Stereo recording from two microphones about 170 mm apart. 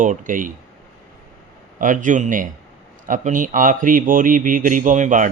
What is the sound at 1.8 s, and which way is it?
A man's voice, 50° right (ahead or behind).